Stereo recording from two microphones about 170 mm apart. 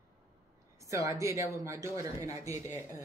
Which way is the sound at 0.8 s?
20° right (ahead or behind).